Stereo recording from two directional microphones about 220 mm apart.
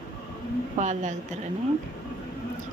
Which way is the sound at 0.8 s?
30° right (ahead or behind).